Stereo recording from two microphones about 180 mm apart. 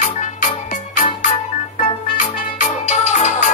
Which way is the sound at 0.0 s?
45° left (ahead or behind).